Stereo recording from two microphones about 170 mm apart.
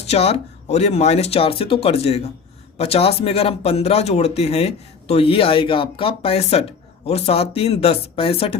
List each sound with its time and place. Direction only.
0.0 s speech: 35° left (ahead or behind)